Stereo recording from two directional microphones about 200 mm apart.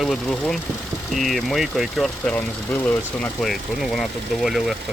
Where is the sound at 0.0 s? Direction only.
Centre (ahead or behind).